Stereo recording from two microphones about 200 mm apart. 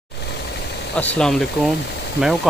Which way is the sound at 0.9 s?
5° left (ahead or behind).